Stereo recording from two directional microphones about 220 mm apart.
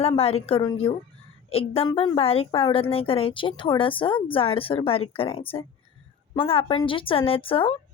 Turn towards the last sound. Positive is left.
turn(degrees=25)  # may be behind; listen again after turning